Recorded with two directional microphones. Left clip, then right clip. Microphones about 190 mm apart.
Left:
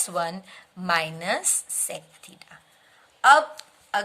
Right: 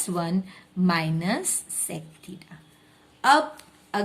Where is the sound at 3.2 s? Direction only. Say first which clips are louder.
Left 3 dB; 30° left (ahead or behind).